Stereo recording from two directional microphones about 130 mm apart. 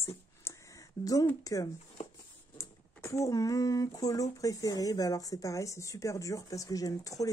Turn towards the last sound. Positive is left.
turn(degrees=25)  # may be behind; listen again after turning